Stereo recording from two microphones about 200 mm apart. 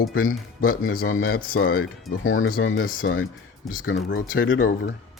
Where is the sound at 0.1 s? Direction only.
90° left.